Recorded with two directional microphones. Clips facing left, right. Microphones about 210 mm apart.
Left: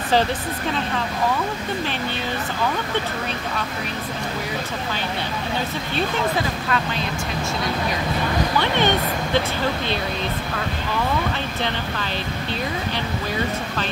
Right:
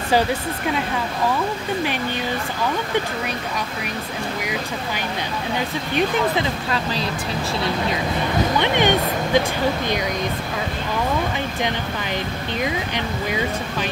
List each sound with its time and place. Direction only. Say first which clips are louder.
6.7 s speech: even; 35° right (ahead or behind)
8.5 s speech: right 2 dB; 15° right (ahead or behind)